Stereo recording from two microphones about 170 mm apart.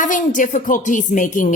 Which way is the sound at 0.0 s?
50° left (ahead or behind).